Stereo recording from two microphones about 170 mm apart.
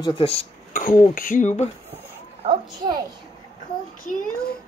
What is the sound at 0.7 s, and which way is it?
Speech, 50° left (ahead or behind).